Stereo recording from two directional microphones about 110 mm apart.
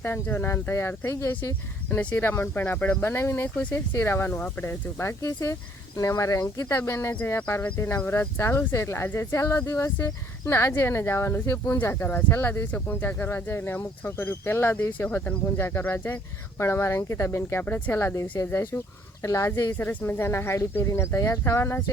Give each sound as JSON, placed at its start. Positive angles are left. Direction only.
{"t": 0.0, "sound": "speech", "side_deg": 20}